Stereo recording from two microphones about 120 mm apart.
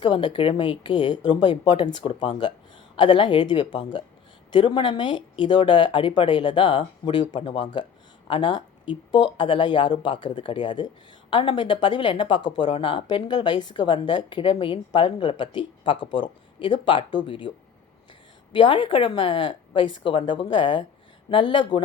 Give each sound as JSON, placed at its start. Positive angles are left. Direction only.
{"t": 0.0, "sound": "a woman's voice", "side_deg": 40}
{"t": 18.5, "sound": "a woman's voice", "side_deg": 45}